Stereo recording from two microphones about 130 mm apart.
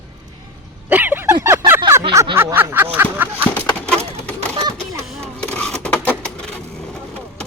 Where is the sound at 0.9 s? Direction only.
15° right (ahead or behind).